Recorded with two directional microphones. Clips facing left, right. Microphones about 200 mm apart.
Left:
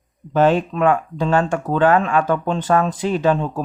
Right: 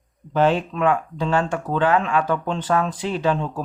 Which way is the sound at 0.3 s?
45° left (ahead or behind).